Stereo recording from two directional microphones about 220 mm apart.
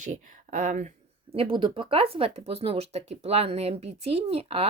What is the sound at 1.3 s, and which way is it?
Speech, 25° right (ahead or behind).